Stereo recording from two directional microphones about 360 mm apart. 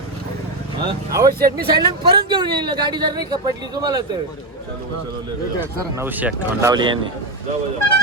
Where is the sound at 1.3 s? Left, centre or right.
Right.